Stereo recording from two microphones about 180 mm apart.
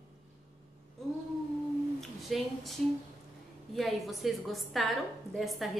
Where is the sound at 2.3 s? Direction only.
Centre (ahead or behind).